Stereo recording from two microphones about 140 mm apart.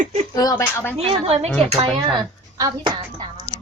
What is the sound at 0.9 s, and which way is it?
Speech, 45° right (ahead or behind).